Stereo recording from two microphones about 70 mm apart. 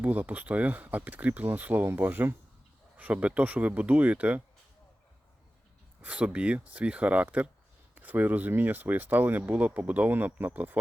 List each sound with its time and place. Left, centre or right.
0.0 s speech: right
6.0 s speech: right